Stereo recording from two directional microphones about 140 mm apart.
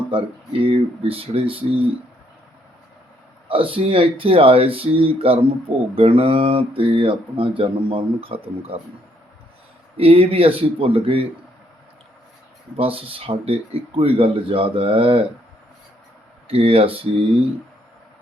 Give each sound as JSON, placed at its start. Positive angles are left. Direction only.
{"t": 0.6, "sound": "speech", "side_deg": -40}
{"t": 3.5, "sound": "speech", "side_deg": -40}
{"t": 10.0, "sound": "speech", "side_deg": -45}
{"t": 12.7, "sound": "speech", "side_deg": -40}
{"t": 16.5, "sound": "speech", "side_deg": -40}